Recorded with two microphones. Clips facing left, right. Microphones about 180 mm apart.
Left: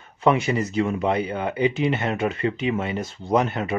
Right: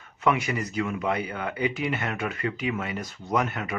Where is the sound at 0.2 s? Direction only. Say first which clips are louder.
Left 5 dB; 30° left (ahead or behind).